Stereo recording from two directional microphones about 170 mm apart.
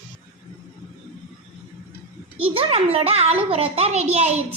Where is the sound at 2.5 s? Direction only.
35° right (ahead or behind).